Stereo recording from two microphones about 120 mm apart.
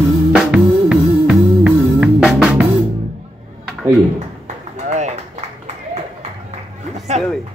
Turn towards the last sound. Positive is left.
turn(degrees=-70)  # may be behind; listen again after turning